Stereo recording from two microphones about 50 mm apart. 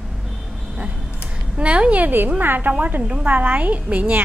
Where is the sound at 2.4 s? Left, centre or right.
Right.